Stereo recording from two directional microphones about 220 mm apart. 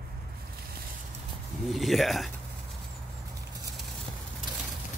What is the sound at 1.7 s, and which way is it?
Speech, centre (ahead or behind).